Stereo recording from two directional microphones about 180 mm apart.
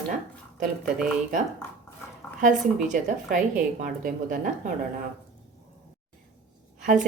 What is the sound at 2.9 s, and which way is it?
A woman's voice, 45° right (ahead or behind).